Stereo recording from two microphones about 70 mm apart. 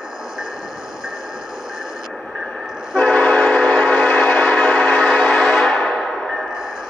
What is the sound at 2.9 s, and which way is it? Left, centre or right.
Train, centre.